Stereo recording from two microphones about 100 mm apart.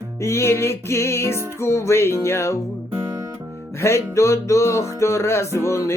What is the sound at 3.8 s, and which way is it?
Music, 25° left (ahead or behind).